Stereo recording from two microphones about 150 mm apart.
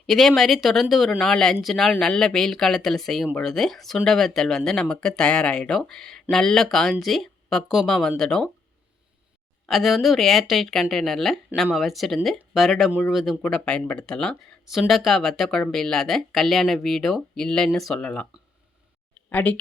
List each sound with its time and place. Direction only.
0.0 s speech: centre (ahead or behind)
9.6 s speech: centre (ahead or behind)
19.3 s speech: 10° left (ahead or behind)